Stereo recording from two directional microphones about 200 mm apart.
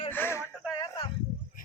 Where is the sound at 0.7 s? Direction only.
20° left (ahead or behind).